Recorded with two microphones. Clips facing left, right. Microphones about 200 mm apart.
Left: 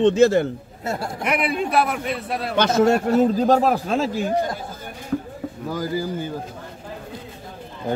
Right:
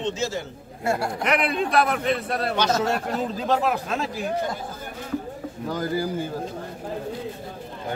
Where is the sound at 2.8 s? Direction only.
50° left (ahead or behind); by 4.2 s 30° left (ahead or behind).